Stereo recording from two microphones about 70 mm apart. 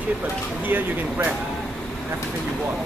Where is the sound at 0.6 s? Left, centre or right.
Right.